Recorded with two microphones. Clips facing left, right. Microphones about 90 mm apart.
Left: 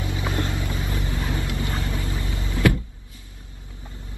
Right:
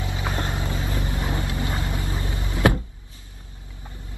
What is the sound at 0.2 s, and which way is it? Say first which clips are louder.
Vehicle: even; 25° right (ahead or behind).